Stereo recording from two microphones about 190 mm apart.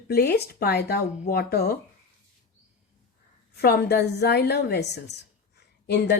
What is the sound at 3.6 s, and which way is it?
A woman's voice, 60° left (ahead or behind).